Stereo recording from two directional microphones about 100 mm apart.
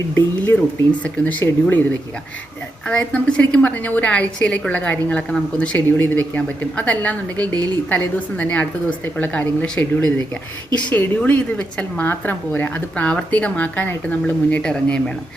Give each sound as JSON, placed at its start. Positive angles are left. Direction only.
{"t": 1.0, "sound": "a woman's voice", "side_deg": 15}
{"t": 2.8, "sound": "a woman's voice", "side_deg": 10}